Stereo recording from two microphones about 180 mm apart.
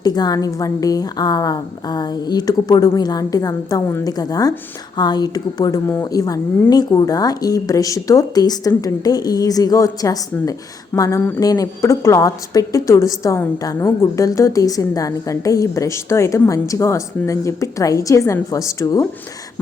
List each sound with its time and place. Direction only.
0.0 s a woman's voice: 20° left (ahead or behind)